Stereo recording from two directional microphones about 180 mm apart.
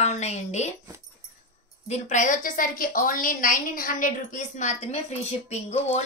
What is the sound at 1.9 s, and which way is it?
A woman's voice, 40° left (ahead or behind).